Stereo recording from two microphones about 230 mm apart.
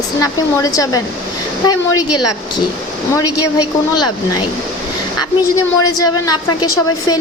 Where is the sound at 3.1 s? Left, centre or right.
Centre.